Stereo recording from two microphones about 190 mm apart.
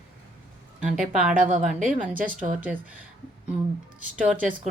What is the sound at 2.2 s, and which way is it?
Speech, 45° right (ahead or behind).